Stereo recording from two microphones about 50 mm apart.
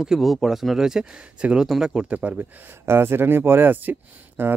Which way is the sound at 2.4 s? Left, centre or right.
Right.